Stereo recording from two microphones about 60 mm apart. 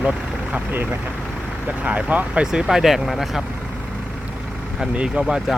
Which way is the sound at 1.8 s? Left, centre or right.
Right.